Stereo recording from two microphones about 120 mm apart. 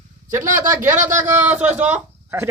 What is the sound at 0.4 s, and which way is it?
Speech, 90° right.